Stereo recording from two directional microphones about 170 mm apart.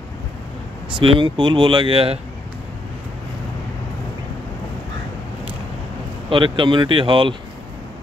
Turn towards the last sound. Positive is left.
turn(degrees=-30)  # may be behind; listen again after turning